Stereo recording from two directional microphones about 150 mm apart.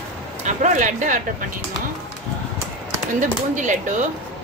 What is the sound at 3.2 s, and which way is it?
Speech, 55° right (ahead or behind).